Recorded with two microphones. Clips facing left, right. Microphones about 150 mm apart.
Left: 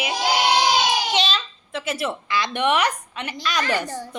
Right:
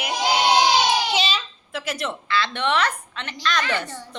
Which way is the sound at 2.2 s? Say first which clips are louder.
Left 1 dB; 15° left (ahead or behind).